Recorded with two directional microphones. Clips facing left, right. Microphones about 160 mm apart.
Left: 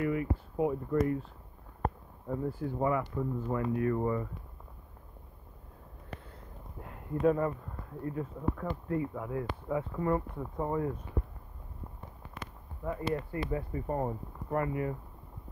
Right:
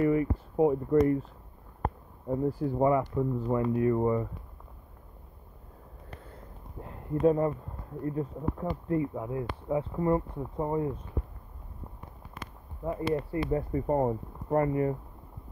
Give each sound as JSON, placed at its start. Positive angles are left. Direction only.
{"t": 0.0, "sound": "speech", "side_deg": -35}
{"t": 2.2, "sound": "speech", "side_deg": -25}
{"t": 6.8, "sound": "a sound", "side_deg": -30}
{"t": 8.0, "sound": "speech", "side_deg": -30}
{"t": 13.1, "sound": "speech", "side_deg": -30}